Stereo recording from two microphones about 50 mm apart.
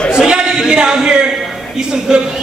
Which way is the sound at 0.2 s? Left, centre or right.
Centre.